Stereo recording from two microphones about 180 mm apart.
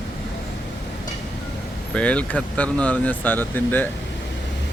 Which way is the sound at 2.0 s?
5° left (ahead or behind).